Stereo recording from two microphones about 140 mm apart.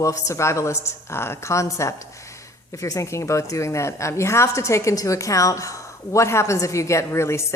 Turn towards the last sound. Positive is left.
turn(degrees=20)  # may be behind; listen again after turning